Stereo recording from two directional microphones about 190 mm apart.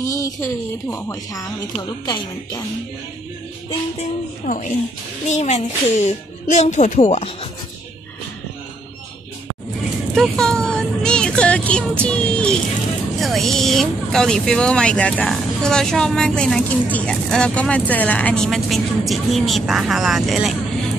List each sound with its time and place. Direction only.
0.0 s a woman's voice: 15° left (ahead or behind)
4.5 s a woman's voice: 45° left (ahead or behind)
10.1 s vehicle: centre (ahead or behind)
13.2 s speech: centre (ahead or behind)